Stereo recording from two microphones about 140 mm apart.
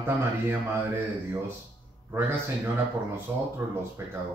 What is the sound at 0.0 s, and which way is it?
Speech, 15° right (ahead or behind).